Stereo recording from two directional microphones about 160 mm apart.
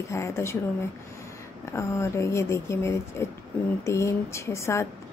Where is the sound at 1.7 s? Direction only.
15° left (ahead or behind).